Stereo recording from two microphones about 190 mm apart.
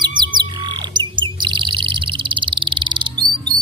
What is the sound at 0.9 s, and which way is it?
Chirp, 25° right (ahead or behind).